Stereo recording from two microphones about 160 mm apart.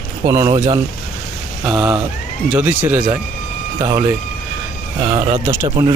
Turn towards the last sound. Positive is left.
turn(degrees=-20)  # may be behind; listen again after turning